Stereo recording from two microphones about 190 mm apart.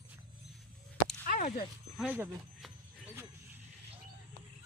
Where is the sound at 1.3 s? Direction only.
45° left (ahead or behind).